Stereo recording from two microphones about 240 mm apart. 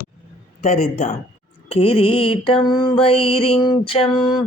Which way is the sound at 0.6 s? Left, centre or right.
Left.